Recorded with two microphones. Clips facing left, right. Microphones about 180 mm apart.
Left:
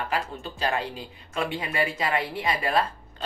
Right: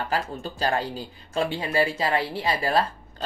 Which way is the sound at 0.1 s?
35° right (ahead or behind).